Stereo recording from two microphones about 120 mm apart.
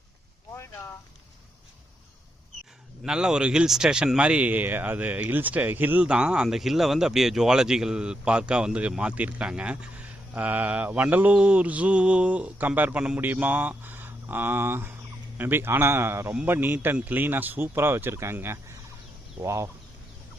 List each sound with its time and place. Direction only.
3.0 s a man's voice: 5° right (ahead or behind); by 19.7 s 25° right (ahead or behind)